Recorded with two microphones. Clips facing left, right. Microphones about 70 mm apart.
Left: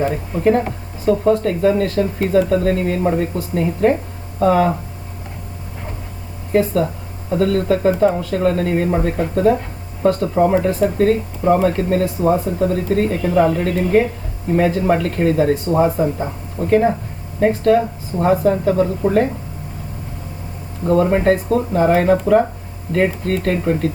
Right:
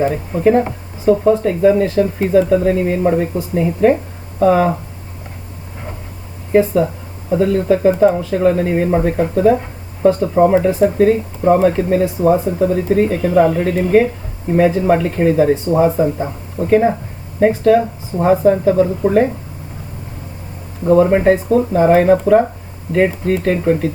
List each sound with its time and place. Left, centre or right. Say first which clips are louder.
0.0 s speech: right 3 dB; centre
6.5 s speech: right 3 dB; centre
10.3 s speech: right 4 dB; right
10.8 s speech: right 3 dB; centre
20.8 s speech: right 4 dB; centre